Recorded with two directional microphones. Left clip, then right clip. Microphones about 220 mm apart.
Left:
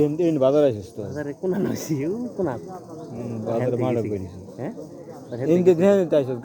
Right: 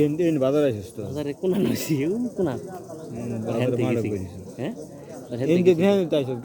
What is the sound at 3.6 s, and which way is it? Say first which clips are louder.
Speech: even; 15° right (ahead or behind).